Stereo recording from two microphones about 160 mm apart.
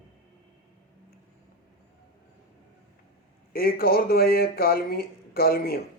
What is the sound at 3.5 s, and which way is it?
Speech, 70° left (ahead or behind).